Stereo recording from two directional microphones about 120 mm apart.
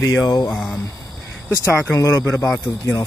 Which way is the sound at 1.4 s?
20° left (ahead or behind).